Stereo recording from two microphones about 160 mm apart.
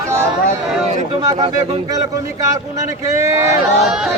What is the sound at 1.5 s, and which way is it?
Speech, 40° right (ahead or behind).